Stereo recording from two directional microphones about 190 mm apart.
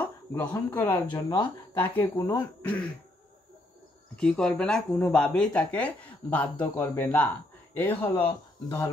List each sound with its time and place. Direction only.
0.0 s speech: 10° left (ahead or behind)
4.2 s speech: 5° left (ahead or behind); by 8.8 s 20° left (ahead or behind)